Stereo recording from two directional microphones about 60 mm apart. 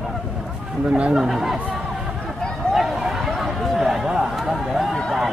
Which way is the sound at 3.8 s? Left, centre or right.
Centre.